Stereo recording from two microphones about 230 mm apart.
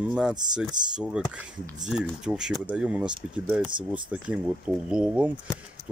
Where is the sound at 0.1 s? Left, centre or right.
Centre.